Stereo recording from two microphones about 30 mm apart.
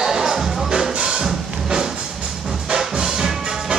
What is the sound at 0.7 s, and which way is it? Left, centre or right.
Music, right.